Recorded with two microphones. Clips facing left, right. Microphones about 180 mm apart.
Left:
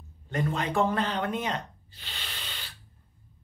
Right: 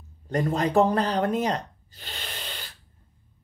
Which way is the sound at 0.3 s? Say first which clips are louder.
Right 5 dB; 40° right (ahead or behind).